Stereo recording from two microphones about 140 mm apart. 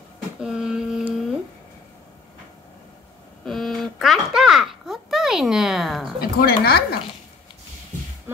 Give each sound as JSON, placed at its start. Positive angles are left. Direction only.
{"t": 0.4, "sound": "mantra", "side_deg": -5}
{"t": 3.4, "sound": "a sound", "side_deg": 0}
{"t": 6.1, "sound": "speech", "side_deg": 90}